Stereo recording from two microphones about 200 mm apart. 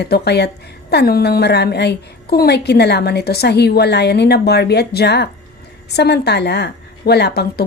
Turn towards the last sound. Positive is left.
turn(degrees=55)  # may be behind; listen again after turning